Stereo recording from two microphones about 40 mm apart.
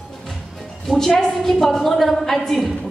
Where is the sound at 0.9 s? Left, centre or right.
Left.